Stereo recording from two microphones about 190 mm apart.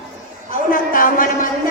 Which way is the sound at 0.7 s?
45° left (ahead or behind).